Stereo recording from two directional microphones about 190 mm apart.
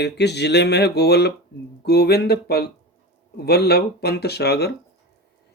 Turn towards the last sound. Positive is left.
turn(degrees=55)  # may be behind; listen again after turning